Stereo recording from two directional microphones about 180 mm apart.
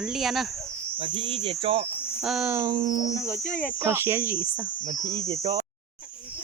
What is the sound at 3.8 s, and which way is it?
Speech, 15° right (ahead or behind).